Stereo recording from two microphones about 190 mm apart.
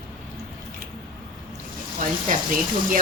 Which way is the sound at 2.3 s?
45° right (ahead or behind).